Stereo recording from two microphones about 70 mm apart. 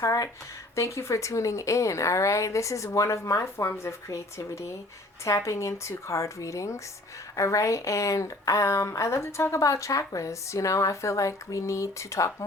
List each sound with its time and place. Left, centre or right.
0.0 s speech: left
0.8 s a woman's voice: left